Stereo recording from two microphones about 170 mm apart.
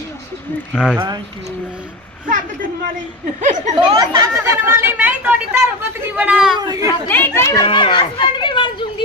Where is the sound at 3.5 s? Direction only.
45° right (ahead or behind).